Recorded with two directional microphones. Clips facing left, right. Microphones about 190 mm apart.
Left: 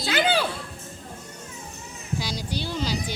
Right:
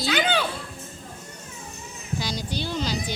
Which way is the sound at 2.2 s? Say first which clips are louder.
Right 2 dB; 10° left (ahead or behind).